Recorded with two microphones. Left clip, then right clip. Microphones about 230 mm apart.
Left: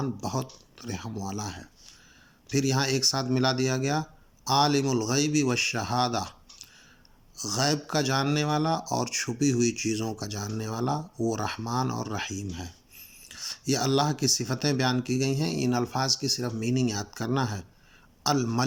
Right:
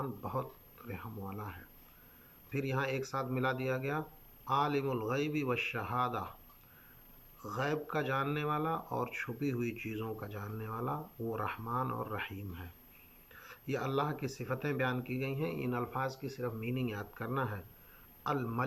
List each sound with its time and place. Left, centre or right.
0.0 s speech: left
7.4 s speech: left
13.3 s a man's voice: left